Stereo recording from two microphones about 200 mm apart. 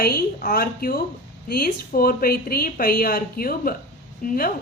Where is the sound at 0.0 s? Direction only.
50° left (ahead or behind).